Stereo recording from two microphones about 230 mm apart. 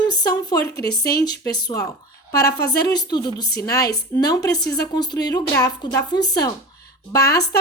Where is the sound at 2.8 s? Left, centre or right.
Centre.